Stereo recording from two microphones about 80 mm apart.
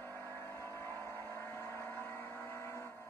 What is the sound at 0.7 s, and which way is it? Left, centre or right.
Vehicle, left.